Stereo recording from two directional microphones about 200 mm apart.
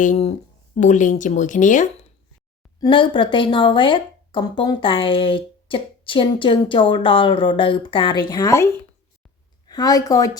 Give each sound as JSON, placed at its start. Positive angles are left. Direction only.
{"t": 0.0, "sound": "speech", "side_deg": 35}
{"t": 2.8, "sound": "a woman's voice", "side_deg": 25}